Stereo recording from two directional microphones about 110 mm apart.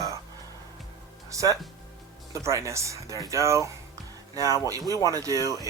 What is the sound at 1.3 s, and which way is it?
Speech, 30° right (ahead or behind).